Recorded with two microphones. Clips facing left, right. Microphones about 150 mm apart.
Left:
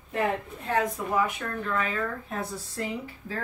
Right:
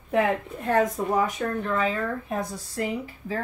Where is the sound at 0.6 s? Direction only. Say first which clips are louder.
Right 5 dB; 45° right (ahead or behind).